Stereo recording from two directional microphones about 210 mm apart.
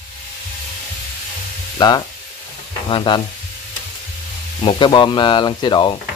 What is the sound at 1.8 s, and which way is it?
Speech, 20° left (ahead or behind).